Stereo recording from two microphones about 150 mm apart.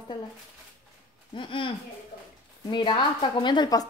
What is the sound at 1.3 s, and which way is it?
A woman's voice, 35° left (ahead or behind).